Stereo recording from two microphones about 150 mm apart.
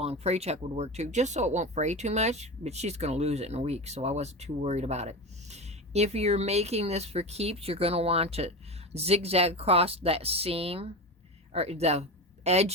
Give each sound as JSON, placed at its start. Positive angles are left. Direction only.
{"t": 0.0, "sound": "speech", "side_deg": -45}